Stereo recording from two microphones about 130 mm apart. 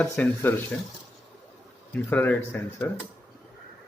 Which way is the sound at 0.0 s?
15° left (ahead or behind).